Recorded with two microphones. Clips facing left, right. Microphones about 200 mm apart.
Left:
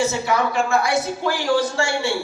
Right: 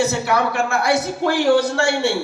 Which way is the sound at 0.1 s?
65° right (ahead or behind).